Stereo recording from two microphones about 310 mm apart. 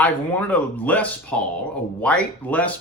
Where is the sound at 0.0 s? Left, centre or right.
Centre.